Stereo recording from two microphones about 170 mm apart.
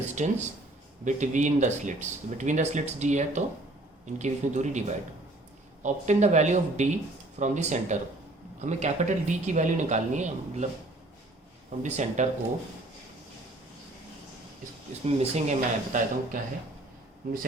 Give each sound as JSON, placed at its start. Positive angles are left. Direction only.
{"t": 0.2, "sound": "speech", "side_deg": -45}
{"t": 11.8, "sound": "speech", "side_deg": -45}
{"t": 15.0, "sound": "speech", "side_deg": -40}